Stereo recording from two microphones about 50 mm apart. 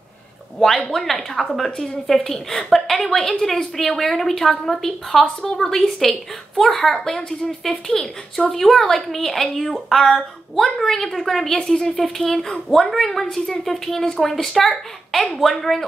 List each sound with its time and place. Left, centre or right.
0.6 s a woman's voice: centre
14.0 s a woman's voice: centre
14.3 s a woman's voice: centre